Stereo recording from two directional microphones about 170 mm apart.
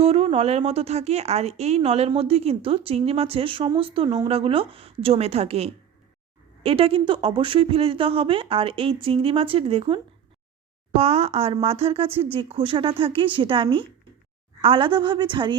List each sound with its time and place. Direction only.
0.0 s a woman's voice: 35° right (ahead or behind)